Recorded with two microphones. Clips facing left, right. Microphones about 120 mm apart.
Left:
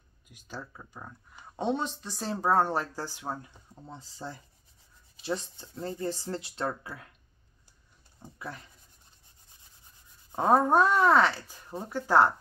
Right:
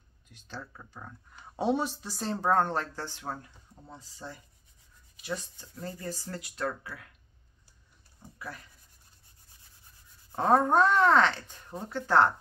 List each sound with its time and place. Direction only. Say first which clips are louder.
0.3 s speech: left 1 dB; 10° left (ahead or behind)
1.6 s speech: right 2 dB; 5° right (ahead or behind); by 3.5 s 10° left (ahead or behind)
3.8 s speech: left 3 dB; 25° left (ahead or behind)
8.4 s speech: left 2 dB; 25° left (ahead or behind)
10.3 s speech: left 1 dB; 10° left (ahead or behind)